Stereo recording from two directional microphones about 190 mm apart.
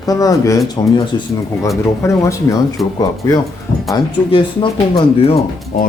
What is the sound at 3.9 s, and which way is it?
Speech, 25° left (ahead or behind).